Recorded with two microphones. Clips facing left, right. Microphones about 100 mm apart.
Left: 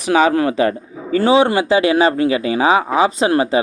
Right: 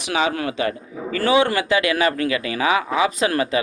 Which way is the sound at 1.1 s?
25° left (ahead or behind).